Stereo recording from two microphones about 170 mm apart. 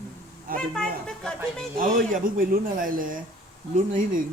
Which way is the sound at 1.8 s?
50° right (ahead or behind).